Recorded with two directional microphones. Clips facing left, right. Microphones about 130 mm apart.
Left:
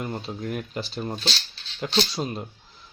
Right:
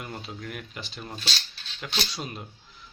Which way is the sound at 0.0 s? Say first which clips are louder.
Left 6 dB; 30° left (ahead or behind).